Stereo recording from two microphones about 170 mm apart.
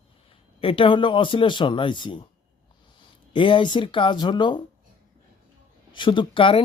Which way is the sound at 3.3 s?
30° left (ahead or behind).